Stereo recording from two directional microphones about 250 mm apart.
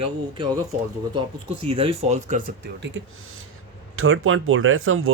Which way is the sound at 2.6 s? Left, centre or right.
Right.